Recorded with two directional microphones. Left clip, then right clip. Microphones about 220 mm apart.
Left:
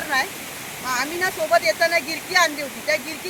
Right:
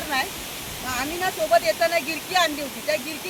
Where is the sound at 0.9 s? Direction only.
5° left (ahead or behind).